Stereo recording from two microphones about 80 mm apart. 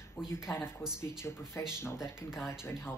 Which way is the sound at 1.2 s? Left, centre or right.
Left.